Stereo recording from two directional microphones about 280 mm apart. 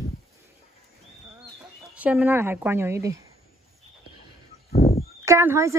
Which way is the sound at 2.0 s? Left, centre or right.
Centre.